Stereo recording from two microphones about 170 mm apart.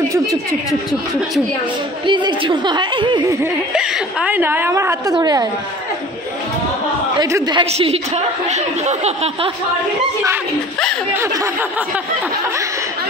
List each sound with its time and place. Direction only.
2.0 s a woman's voice: 25° right (ahead or behind)
3.7 s a woman's voice: 5° right (ahead or behind); by 5.5 s 20° right (ahead or behind)
7.2 s a woman's voice: 20° right (ahead or behind)
7.7 s speech: 35° right (ahead or behind)
11.1 s speech: 15° right (ahead or behind)